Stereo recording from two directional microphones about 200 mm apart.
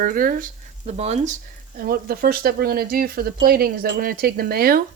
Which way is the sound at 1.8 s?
45° right (ahead or behind).